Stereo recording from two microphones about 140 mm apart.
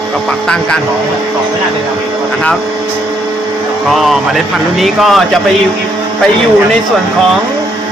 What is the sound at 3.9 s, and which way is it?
Speech, centre (ahead or behind).